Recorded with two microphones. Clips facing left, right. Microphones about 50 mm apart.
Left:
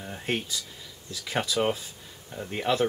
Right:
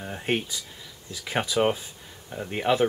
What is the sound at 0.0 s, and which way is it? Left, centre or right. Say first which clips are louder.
Speech: right 3 dB; centre.